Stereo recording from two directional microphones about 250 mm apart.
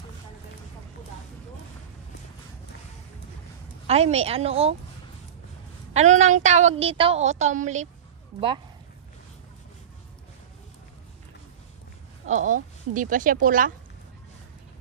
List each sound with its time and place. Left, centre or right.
3.8 s a woman's voice: right
5.9 s a woman's voice: right
12.3 s speech: right